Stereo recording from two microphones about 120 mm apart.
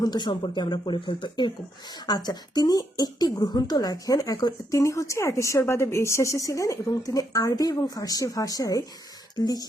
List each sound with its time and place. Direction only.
0.0 s speech: 35° left (ahead or behind)